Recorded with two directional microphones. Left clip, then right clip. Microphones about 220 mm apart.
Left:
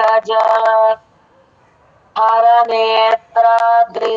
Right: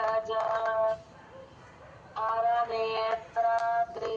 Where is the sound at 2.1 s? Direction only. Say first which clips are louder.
Left 17 dB; 40° left (ahead or behind).